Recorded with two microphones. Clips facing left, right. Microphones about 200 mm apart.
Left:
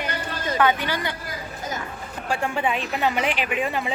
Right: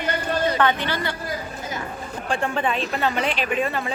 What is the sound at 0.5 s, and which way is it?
Speech, 10° left (ahead or behind).